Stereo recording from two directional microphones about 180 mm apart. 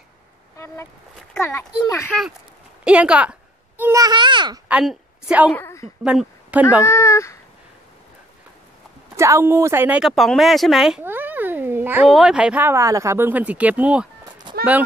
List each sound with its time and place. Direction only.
2.8 s a child's voice: 5° right (ahead or behind); by 4.6 s 25° right (ahead or behind)
4.6 s a woman's voice: 5° right (ahead or behind)
5.5 s a woman's voice: 15° left (ahead or behind)
6.0 s speech: 5° right (ahead or behind)
6.8 s a sound: 15° left (ahead or behind)
9.1 s speech: 15° right (ahead or behind)
14.5 s a sound: 25° right (ahead or behind)